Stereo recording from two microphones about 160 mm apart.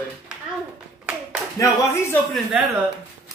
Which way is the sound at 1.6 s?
15° left (ahead or behind).